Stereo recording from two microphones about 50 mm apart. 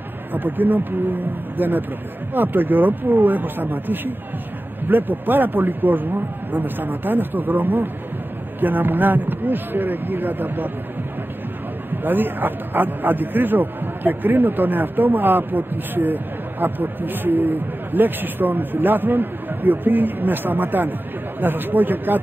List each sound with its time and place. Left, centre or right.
0.3 s a man's voice: right
11.9 s a man's voice: right